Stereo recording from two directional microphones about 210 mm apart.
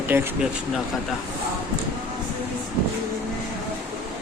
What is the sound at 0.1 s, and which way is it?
Speech, 10° right (ahead or behind).